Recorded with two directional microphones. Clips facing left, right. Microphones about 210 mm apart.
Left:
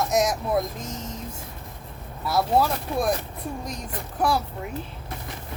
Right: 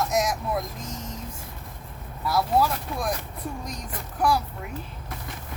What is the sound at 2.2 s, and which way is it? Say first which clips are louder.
Speech: left 1 dB; 25° left (ahead or behind).